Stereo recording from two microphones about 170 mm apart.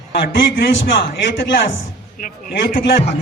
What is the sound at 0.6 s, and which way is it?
Speech, 90° left.